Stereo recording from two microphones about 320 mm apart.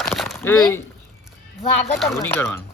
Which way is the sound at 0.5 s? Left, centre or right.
Centre.